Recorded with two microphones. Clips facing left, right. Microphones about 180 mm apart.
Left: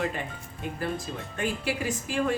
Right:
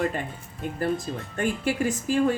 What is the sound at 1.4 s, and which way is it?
Speech, 50° right (ahead or behind).